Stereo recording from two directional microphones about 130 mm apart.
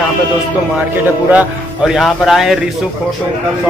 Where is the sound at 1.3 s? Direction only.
5° right (ahead or behind).